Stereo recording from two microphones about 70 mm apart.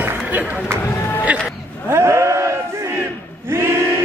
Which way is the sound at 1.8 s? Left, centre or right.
Right.